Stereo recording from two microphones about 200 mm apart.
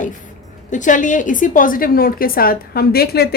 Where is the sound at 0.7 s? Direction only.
40° left (ahead or behind).